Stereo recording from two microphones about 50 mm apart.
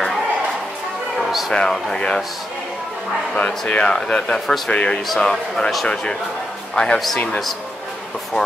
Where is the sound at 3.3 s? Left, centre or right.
Left.